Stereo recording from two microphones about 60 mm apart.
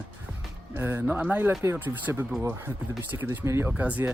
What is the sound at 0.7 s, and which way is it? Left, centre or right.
Speech, right.